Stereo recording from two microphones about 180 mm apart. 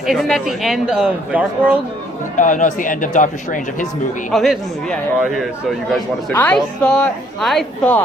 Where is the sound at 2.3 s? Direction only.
45° left (ahead or behind).